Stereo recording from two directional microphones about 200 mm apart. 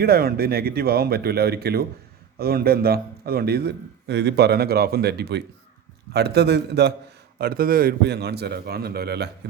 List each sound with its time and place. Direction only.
0.0 s a man's voice: 50° right (ahead or behind)